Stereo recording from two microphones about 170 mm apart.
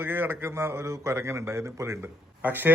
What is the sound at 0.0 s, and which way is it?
A man's voice, 10° right (ahead or behind).